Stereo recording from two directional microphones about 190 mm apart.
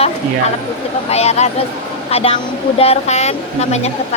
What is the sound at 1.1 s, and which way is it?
A woman's voice, 35° left (ahead or behind).